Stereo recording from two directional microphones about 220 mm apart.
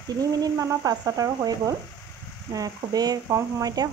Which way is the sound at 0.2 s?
15° right (ahead or behind).